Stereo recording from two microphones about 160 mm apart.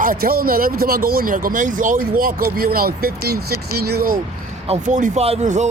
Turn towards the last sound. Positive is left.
turn(degrees=-45)  # may be behind; listen again after turning